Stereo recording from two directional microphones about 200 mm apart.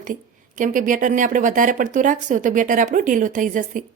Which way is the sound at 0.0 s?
40° right (ahead or behind).